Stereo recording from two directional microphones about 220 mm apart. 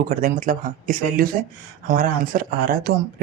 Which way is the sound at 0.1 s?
35° right (ahead or behind).